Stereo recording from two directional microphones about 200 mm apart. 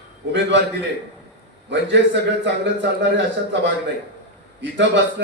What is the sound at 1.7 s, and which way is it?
A man's voice, 65° right (ahead or behind).